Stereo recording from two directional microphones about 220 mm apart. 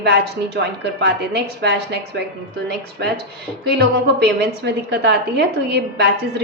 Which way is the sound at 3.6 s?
50° right (ahead or behind).